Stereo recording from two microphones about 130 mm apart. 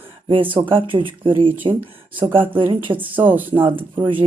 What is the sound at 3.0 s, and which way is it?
Speech, 15° right (ahead or behind).